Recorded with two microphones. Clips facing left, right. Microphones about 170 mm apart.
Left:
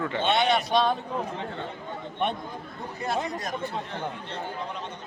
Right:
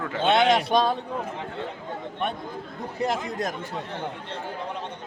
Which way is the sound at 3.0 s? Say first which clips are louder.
Even; 90° right.